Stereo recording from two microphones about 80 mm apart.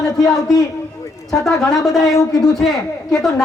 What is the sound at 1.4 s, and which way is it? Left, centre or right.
Speech, centre.